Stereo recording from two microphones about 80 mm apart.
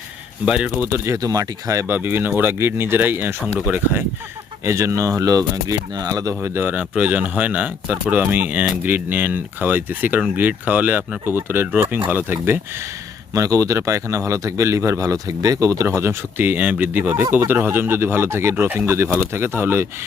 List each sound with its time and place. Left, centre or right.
0.4 s speech: centre
0.8 s speech: right
4.6 s speech: right
6.4 s speech: right
13.3 s speech: right